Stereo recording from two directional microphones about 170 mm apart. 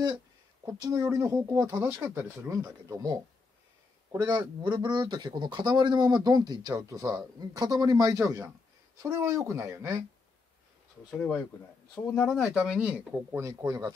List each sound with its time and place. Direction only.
0.7 s a man's voice: 20° right (ahead or behind)
11.1 s speech: 5° left (ahead or behind); by 13.9 s 20° right (ahead or behind)